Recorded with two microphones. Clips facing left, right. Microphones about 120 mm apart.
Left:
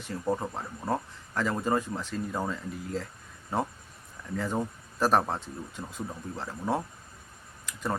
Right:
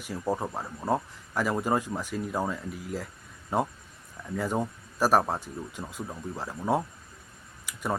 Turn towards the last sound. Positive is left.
turn(degrees=-10)  # may be behind; listen again after turning